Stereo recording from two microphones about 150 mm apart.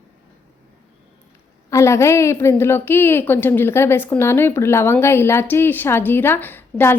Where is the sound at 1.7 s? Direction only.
20° left (ahead or behind).